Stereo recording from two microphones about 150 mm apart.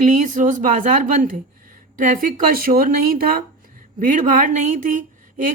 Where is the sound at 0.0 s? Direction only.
60° right (ahead or behind); by 3.4 s 80° right.